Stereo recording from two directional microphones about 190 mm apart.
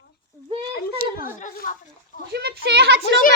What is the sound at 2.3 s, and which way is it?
Speech, 60° right (ahead or behind).